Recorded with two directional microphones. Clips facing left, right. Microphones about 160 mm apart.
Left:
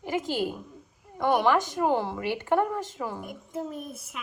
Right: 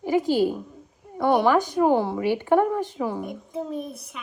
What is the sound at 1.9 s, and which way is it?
A woman's voice, 15° right (ahead or behind).